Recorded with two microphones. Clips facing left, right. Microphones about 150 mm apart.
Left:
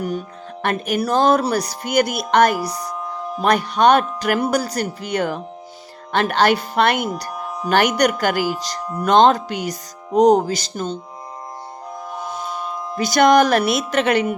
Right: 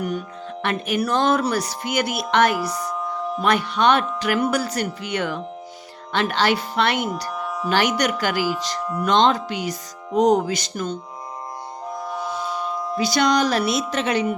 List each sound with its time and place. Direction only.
0.0 s speech: 35° left (ahead or behind)
12.3 s civil defense siren: 45° left (ahead or behind)
13.0 s speech: 50° left (ahead or behind)